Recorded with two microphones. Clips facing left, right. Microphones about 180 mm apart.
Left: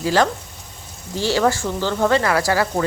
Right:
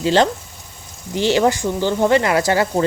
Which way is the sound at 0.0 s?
25° right (ahead or behind).